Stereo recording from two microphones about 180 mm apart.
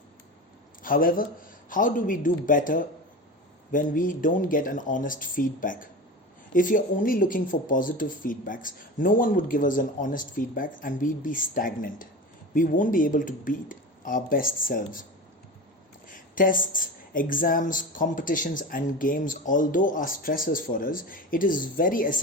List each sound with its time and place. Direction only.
0.8 s speech: 50° left (ahead or behind)
16.0 s speech: 50° left (ahead or behind)